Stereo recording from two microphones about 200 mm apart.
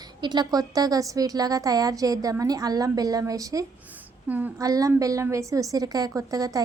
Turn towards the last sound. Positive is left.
turn(degrees=-15)  # may be behind; listen again after turning